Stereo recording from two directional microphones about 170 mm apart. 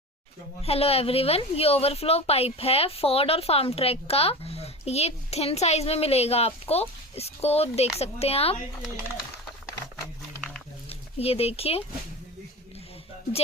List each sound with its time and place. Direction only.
0.6 s a woman's voice: 35° left (ahead or behind)
10.8 s speech: 35° left (ahead or behind)